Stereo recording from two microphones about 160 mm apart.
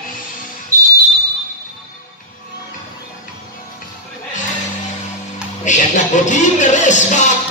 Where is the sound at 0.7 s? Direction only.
20° right (ahead or behind).